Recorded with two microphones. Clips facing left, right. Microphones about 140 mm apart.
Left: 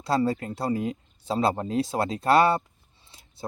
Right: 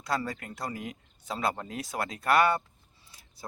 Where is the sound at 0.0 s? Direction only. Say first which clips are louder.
Left 8 dB; 30° left (ahead or behind).